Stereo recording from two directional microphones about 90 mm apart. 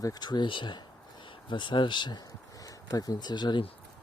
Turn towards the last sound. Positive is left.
turn(degrees=55)  # may be behind; listen again after turning